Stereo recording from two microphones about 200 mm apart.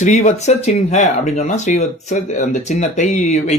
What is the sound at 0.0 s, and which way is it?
Speech, 35° left (ahead or behind).